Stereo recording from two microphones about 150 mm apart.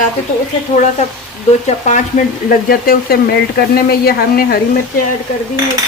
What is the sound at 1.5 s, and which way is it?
Speech, 50° left (ahead or behind).